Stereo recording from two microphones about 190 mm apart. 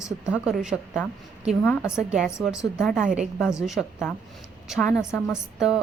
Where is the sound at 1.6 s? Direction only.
10° left (ahead or behind).